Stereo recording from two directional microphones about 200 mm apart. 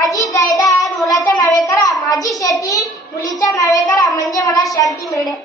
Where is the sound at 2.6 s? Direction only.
15° left (ahead or behind).